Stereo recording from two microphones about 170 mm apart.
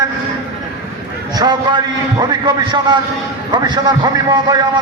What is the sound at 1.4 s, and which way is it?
A man's voice, 25° right (ahead or behind).